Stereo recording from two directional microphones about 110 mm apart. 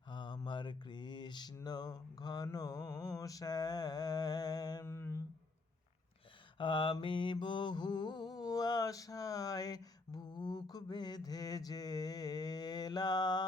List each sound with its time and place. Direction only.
0.1 s mantra: 45° left (ahead or behind)
4.9 s a sound: 25° left (ahead or behind)
6.6 s mantra: 50° left (ahead or behind)